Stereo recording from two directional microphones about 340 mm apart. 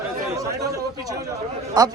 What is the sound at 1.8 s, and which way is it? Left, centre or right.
Speech, centre.